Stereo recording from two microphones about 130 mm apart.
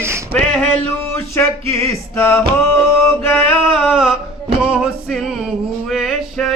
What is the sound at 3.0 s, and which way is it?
Music, 20° left (ahead or behind).